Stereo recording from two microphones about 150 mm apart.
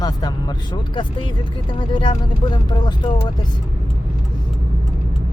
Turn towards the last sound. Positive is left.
turn(degrees=30)  # may be behind; listen again after turning